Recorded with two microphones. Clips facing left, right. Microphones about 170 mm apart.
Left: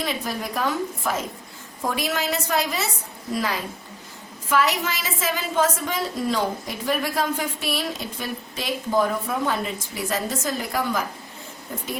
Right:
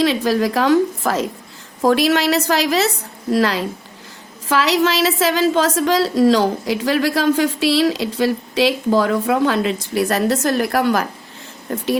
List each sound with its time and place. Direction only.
0.0 s a woman's voice: 90° right